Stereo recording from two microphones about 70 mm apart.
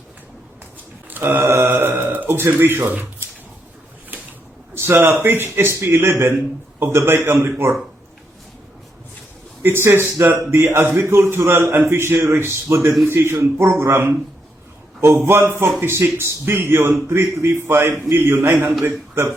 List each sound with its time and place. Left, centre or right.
1.1 s speech: right
4.7 s a sound: right
5.2 s a man's voice: right
5.7 s a man's voice: right
6.0 s a man's voice: right
9.6 s a man's voice: right
13.7 s a man's voice: right
15.3 s a man's voice: right